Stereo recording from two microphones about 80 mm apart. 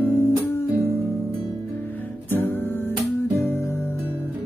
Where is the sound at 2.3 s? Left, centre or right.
Left.